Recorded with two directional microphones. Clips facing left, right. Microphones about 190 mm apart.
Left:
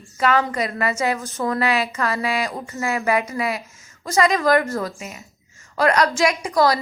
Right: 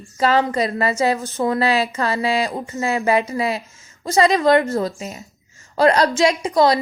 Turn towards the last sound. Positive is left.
turn(degrees=-25)  # may be behind; listen again after turning